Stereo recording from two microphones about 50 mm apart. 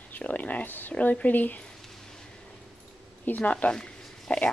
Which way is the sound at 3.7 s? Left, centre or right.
Centre.